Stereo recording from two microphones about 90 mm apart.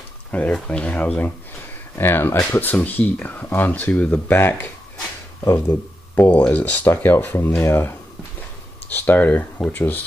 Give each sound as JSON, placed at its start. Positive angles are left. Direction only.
{"t": 0.3, "sound": "speech", "side_deg": 15}
{"t": 4.4, "sound": "speech", "side_deg": 25}